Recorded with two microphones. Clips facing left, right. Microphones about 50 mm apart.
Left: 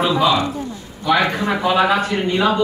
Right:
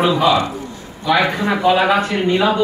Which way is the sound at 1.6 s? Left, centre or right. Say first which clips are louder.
Right 2 dB; centre.